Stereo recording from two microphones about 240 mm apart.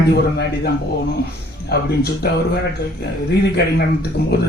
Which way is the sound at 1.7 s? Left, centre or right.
Left.